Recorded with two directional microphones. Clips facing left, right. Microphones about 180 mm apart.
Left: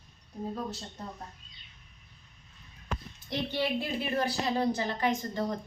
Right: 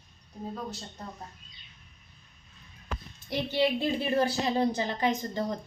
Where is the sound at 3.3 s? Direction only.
10° right (ahead or behind).